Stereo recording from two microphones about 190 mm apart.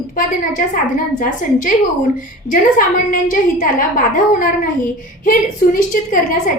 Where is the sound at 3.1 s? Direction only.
45° left (ahead or behind).